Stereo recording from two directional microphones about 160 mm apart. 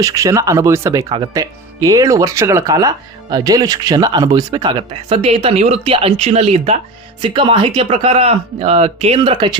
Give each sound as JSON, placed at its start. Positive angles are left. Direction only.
{"t": 0.0, "sound": "speech", "side_deg": -20}